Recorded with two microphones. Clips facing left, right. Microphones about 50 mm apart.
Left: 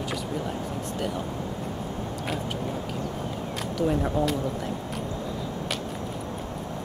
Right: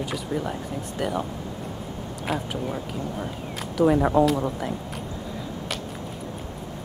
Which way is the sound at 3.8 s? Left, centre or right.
Right.